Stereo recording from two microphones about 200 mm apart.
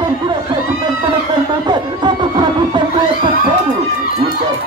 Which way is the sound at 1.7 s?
20° right (ahead or behind).